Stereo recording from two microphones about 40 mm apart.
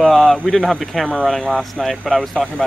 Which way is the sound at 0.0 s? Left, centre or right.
Centre.